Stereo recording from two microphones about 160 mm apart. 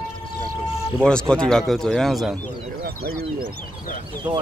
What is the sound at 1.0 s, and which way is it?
Speech, 5° left (ahead or behind).